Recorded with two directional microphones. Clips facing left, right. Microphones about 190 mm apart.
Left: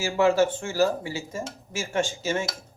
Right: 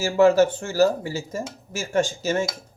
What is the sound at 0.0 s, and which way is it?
Speech, 40° right (ahead or behind).